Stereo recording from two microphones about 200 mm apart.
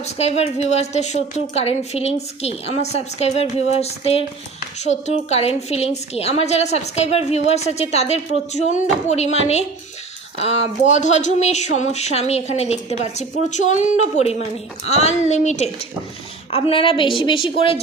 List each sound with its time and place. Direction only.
0.0 s a woman's voice: 30° left (ahead or behind)